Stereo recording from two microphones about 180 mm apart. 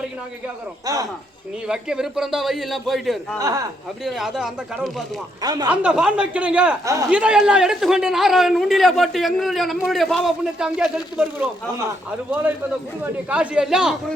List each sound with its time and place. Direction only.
0.9 s speech: 20° right (ahead or behind)
1.6 s a man's voice: 5° right (ahead or behind)
3.3 s speech: 20° right (ahead or behind)
4.0 s a man's voice: centre (ahead or behind)
5.4 s speech: 20° right (ahead or behind)
5.6 s speech: 5° right (ahead or behind)
6.8 s speech: 20° right (ahead or behind)
7.1 s a man's voice: 5° right (ahead or behind)
13.2 s a man's voice: 5° right (ahead or behind)